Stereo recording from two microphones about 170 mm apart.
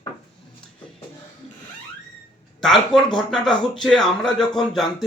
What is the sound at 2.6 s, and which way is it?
Speech, centre (ahead or behind).